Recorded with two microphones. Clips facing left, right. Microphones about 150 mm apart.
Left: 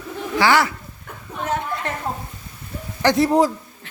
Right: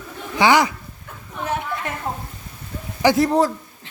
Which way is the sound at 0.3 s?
20° right (ahead or behind).